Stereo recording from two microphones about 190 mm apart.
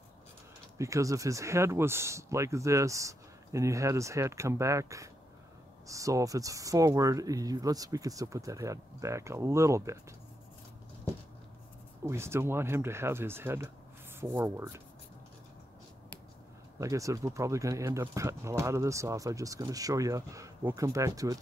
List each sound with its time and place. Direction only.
0.7 s speech: 15° right (ahead or behind)
12.1 s speech: 15° right (ahead or behind)
16.8 s speech: 15° right (ahead or behind)